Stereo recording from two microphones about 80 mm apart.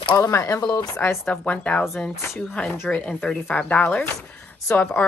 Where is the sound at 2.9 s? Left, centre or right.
Centre.